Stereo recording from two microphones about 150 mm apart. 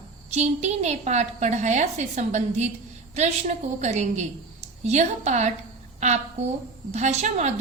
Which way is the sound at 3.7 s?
50° right (ahead or behind).